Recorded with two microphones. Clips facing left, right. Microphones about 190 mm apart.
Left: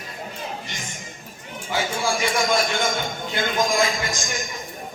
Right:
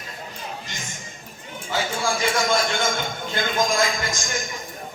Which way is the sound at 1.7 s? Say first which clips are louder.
Left 1 dB; 15° left (ahead or behind).